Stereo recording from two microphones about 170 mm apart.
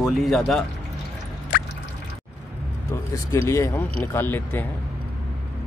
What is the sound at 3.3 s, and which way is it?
Speech, 15° left (ahead or behind).